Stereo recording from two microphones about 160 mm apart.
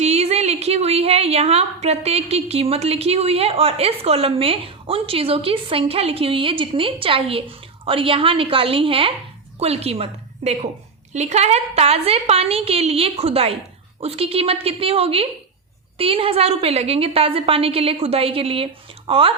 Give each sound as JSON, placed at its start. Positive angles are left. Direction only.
{"t": 0.0, "sound": "a woman's voice", "side_deg": -40}